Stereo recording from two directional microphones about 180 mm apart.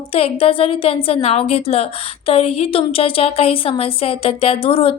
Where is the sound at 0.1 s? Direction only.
30° left (ahead or behind).